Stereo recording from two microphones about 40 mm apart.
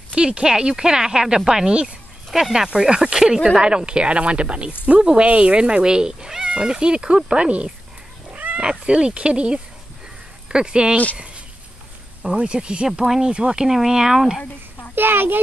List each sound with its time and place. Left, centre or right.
0.1 s speech: right
1.7 s speech: right
2.3 s speech: centre
2.7 s speech: right
8.3 s cat: right
8.5 s speech: right
12.2 s speech: right
12.8 s speech: centre
15.0 s a child's voice: right